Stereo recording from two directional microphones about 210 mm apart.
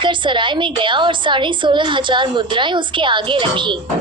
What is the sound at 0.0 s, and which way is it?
A woman's voice, 25° right (ahead or behind).